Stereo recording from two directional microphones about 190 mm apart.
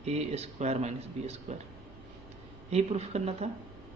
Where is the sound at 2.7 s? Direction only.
35° right (ahead or behind).